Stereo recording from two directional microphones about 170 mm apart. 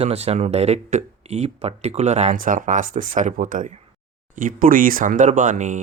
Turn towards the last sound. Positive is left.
turn(degrees=-45)  # may be behind; listen again after turning